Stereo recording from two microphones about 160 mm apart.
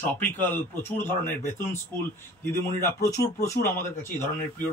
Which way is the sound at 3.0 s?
20° left (ahead or behind).